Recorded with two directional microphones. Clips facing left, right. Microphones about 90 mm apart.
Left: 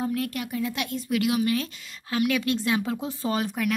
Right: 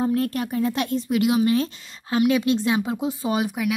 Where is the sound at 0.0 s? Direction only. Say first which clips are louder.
Right 6 dB; 35° right (ahead or behind).